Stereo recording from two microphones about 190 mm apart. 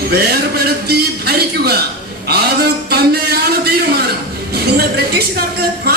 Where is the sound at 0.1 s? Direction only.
55° right (ahead or behind).